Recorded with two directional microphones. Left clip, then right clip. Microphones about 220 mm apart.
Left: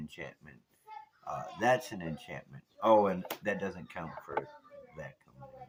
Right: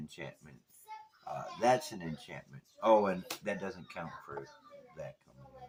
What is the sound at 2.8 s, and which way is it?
Speech, 30° left (ahead or behind).